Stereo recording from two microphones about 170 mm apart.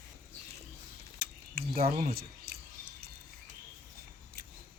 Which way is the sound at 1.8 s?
65° right (ahead or behind).